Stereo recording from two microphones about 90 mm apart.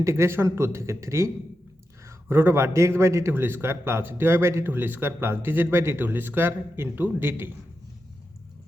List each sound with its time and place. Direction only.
0.0 s a man's voice: 30° right (ahead or behind)